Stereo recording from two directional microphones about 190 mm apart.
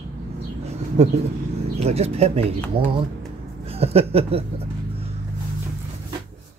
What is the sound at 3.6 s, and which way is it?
Speech, 30° right (ahead or behind).